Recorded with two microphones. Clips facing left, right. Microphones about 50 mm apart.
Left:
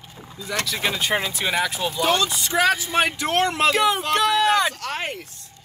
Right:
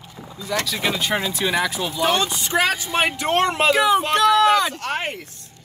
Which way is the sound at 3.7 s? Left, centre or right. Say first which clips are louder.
Right 3 dB; centre.